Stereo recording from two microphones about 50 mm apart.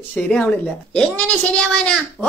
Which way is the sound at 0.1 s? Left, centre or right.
Centre.